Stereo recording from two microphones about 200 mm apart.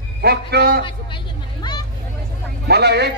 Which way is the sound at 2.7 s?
55° right (ahead or behind).